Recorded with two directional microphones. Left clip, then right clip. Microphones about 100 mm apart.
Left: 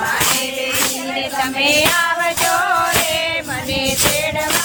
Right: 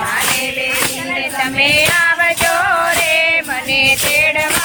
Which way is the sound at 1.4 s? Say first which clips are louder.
Right 2 dB; 20° left (ahead or behind).